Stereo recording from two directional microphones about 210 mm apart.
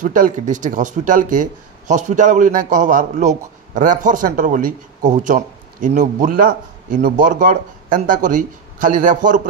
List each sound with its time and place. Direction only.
0.0 s speech: 40° right (ahead or behind)